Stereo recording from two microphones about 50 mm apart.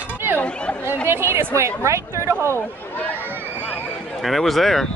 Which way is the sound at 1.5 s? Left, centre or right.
Right.